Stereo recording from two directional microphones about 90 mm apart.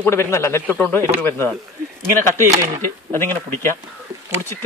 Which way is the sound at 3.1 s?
25° left (ahead or behind).